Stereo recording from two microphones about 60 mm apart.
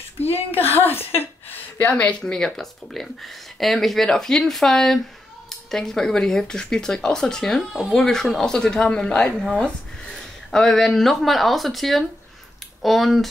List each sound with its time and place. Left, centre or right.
0.2 s a woman's voice: left
2.3 s speech: centre